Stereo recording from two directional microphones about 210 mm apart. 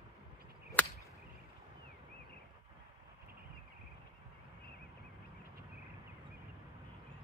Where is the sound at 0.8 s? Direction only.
5° left (ahead or behind).